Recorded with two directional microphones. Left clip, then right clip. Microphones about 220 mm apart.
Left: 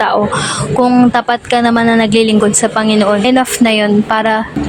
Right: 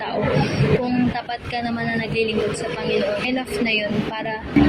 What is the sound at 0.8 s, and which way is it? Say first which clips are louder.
A woman's voice: left 13 dB; 50° left (ahead or behind).